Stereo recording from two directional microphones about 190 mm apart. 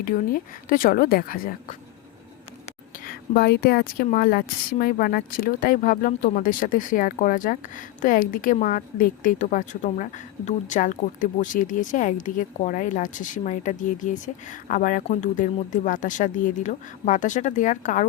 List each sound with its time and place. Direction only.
0.0 s a woman's voice: 45° left (ahead or behind)
3.0 s a woman's voice: 50° left (ahead or behind)